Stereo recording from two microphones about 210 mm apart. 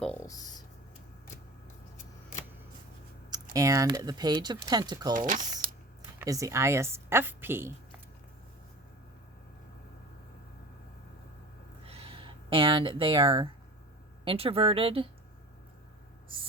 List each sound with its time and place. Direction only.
0.0 s a sound: 10° left (ahead or behind)
3.2 s speech: 15° right (ahead or behind)
5.1 s speech: 40° right (ahead or behind)
6.1 s speech: 15° right (ahead or behind)
11.9 s a sound: 25° right (ahead or behind)
14.3 s speech: 25° right (ahead or behind)